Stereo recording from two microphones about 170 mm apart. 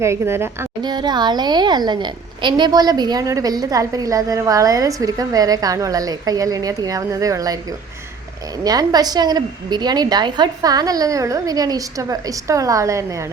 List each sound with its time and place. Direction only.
0.0 s a woman's voice: 15° right (ahead or behind)
0.8 s a woman's voice: 25° right (ahead or behind)
8.6 s a woman's voice: 20° right (ahead or behind)